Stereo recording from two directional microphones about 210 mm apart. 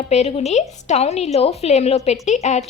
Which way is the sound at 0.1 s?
30° left (ahead or behind).